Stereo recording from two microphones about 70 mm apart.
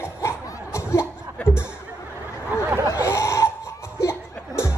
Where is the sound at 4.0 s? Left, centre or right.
Left.